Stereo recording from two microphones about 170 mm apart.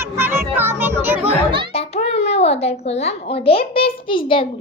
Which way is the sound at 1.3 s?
30° right (ahead or behind).